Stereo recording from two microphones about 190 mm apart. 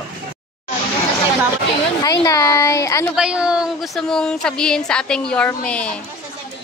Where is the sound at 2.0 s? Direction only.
20° left (ahead or behind).